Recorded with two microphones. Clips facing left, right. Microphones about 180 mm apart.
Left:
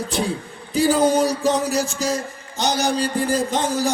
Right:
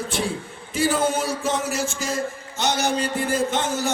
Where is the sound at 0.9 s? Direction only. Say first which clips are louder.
Left 6 dB; 35° left (ahead or behind).